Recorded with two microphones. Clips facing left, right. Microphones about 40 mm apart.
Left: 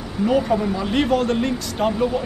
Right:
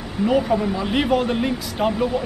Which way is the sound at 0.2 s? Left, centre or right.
Centre.